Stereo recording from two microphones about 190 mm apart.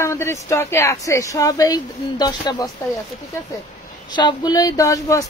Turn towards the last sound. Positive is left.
turn(degrees=15)  # may be behind; listen again after turning